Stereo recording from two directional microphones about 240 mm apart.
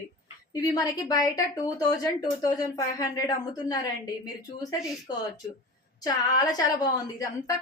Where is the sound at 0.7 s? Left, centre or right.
Centre.